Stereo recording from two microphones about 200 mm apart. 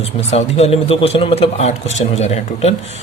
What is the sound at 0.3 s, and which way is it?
Speech, 30° left (ahead or behind).